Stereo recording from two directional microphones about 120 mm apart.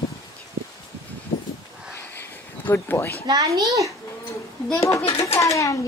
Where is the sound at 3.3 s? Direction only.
30° right (ahead or behind).